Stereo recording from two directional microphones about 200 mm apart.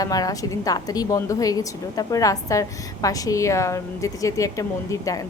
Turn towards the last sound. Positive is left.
turn(degrees=15)  # may be behind; listen again after turning